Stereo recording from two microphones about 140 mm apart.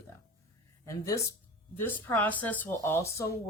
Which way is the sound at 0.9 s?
20° left (ahead or behind).